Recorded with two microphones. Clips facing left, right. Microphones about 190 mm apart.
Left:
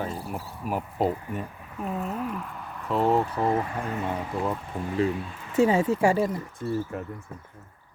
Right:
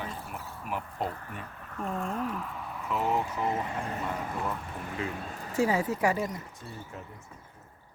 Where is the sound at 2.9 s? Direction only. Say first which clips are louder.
Left 6 dB; 35° left (ahead or behind).